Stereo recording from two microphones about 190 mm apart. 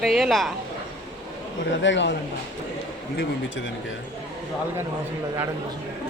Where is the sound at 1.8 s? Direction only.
70° left (ahead or behind).